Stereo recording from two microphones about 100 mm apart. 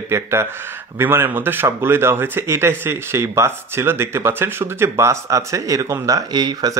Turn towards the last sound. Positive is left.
turn(degrees=-40)  # may be behind; listen again after turning